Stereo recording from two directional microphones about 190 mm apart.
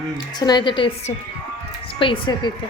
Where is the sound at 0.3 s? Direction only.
20° left (ahead or behind).